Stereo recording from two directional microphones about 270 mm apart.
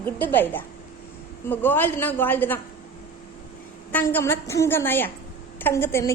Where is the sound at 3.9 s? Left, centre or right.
Centre.